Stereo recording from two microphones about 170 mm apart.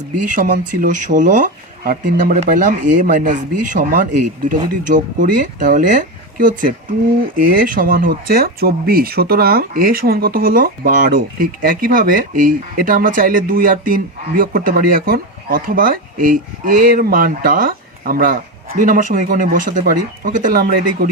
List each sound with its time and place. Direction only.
0.3 s speech: 50° right (ahead or behind)